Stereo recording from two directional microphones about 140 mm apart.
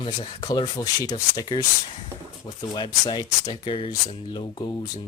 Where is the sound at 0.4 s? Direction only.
30° left (ahead or behind).